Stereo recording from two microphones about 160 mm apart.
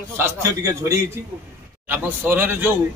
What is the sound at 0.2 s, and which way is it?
A man's voice, 20° right (ahead or behind).